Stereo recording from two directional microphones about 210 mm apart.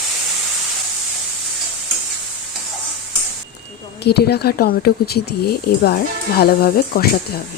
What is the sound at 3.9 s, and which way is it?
Speech, 50° left (ahead or behind).